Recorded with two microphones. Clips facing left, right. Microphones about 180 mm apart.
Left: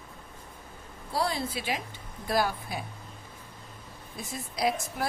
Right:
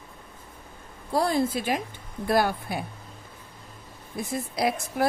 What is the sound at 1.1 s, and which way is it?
Speech, 50° right (ahead or behind).